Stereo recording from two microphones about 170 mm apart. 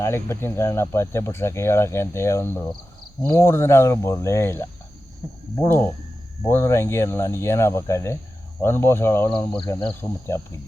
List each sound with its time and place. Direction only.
0.0 s speech: 15° left (ahead or behind)